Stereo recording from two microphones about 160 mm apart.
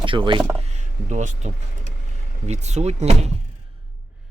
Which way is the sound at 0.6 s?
45° right (ahead or behind).